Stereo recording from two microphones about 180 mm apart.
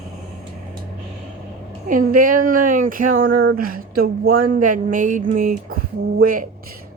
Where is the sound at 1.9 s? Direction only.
50° right (ahead or behind).